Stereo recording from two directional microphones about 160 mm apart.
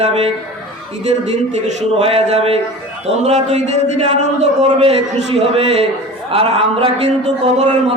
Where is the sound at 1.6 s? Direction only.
40° right (ahead or behind).